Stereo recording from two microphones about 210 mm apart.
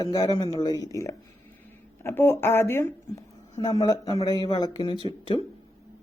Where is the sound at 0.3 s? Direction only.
20° left (ahead or behind).